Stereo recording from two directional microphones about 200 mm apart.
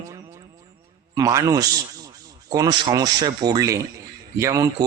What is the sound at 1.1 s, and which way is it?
A man's voice, 15° right (ahead or behind).